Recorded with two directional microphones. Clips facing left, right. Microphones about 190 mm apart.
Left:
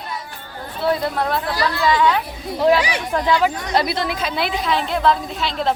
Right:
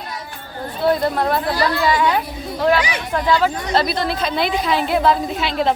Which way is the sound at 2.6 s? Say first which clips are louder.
Left 1 dB; 10° left (ahead or behind).